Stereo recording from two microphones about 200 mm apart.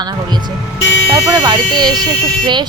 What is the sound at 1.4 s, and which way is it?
A woman's voice, 20° right (ahead or behind).